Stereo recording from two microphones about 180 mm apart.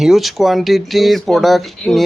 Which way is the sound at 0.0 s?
Centre (ahead or behind).